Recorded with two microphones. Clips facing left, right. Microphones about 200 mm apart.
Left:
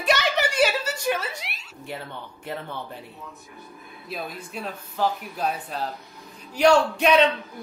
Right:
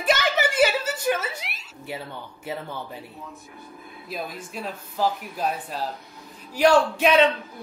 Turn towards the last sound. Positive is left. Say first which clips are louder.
# even
turn(degrees=-5)  # may be behind; listen again after turning